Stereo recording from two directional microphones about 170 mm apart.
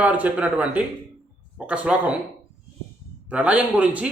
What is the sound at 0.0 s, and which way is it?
Speech, 10° right (ahead or behind).